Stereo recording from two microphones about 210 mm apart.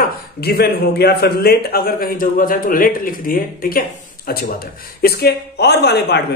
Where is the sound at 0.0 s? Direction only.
50° left (ahead or behind).